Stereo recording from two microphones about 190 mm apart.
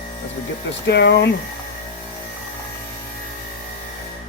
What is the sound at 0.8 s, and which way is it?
Speech, 65° left (ahead or behind).